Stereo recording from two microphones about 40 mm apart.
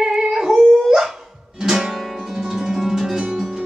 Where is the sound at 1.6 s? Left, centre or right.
Centre.